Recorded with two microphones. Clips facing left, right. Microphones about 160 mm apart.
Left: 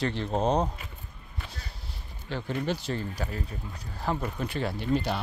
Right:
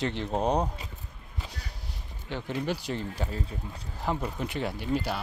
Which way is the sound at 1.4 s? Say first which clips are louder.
Right 1 dB; 15° right (ahead or behind).